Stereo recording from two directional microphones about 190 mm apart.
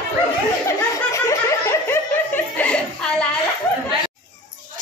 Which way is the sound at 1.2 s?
15° left (ahead or behind).